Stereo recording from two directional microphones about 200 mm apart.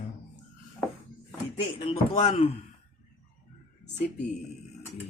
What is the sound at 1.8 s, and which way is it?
Speech, 30° left (ahead or behind).